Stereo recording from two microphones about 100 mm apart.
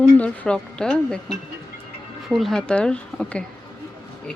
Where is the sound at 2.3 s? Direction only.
Centre (ahead or behind).